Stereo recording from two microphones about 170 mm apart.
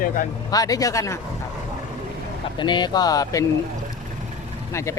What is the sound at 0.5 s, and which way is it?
Speech, 20° left (ahead or behind).